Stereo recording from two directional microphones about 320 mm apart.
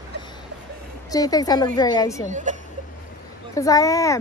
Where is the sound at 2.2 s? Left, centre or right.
Right.